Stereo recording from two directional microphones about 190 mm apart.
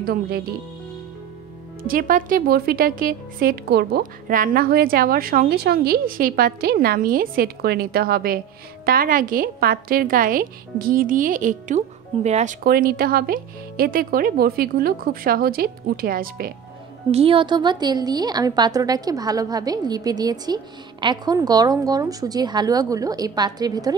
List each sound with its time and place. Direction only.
0.0 s speech: 50° right (ahead or behind)
1.8 s speech: 50° right (ahead or behind)
12.6 s speech: 50° right (ahead or behind)
17.1 s a woman's voice: 30° right (ahead or behind)